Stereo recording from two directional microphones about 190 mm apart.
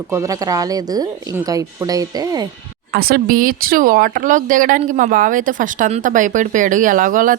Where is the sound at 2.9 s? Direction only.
50° right (ahead or behind).